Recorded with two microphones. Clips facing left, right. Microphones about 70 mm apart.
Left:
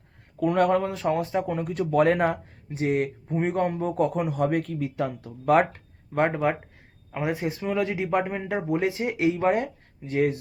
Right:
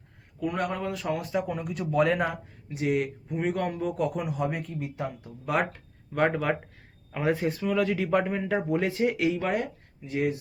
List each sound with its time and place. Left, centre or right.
0.3 s speech: left
0.9 s speech: left
1.5 s speech: left
5.5 s speech: left
6.1 s speech: left
10.0 s speech: left